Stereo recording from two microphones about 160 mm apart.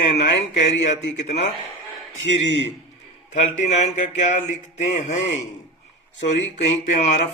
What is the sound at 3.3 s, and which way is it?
Speech, 45° left (ahead or behind).